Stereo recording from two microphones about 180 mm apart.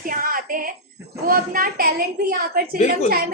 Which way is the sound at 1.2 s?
50° right (ahead or behind).